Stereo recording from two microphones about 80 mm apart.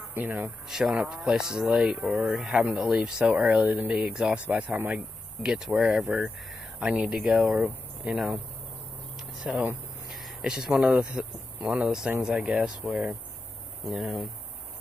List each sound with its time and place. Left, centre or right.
0.1 s speech: right
0.7 s speech: centre
5.4 s speech: centre
9.4 s speech: centre